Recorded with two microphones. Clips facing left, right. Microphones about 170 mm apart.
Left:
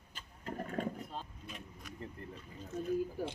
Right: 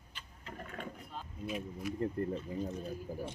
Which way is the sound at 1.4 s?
5° right (ahead or behind).